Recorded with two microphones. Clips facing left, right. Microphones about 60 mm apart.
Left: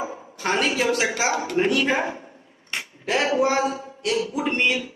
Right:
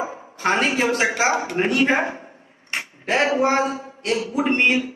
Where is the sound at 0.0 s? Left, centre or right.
Right.